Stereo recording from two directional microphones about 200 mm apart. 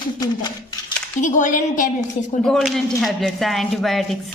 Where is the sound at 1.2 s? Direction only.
40° left (ahead or behind).